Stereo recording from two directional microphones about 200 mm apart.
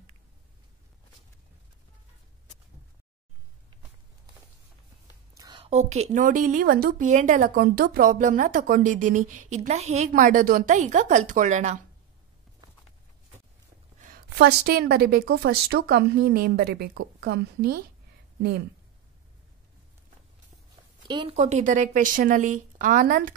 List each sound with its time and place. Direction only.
5.3 s a woman's voice: 20° right (ahead or behind)
14.0 s a woman's voice: 50° right (ahead or behind)
21.1 s a woman's voice: 25° right (ahead or behind); by 23.3 s 45° right (ahead or behind)